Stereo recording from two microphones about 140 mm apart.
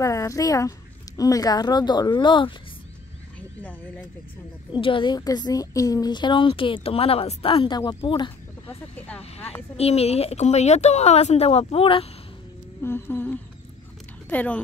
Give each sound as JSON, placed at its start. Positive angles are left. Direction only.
{"t": 0.0, "sound": "speech", "side_deg": 20}
{"t": 4.7, "sound": "a woman's voice", "side_deg": 35}
{"t": 8.6, "sound": "speech", "side_deg": 10}
{"t": 9.8, "sound": "speech", "side_deg": 45}
{"t": 12.8, "sound": "speech", "side_deg": 15}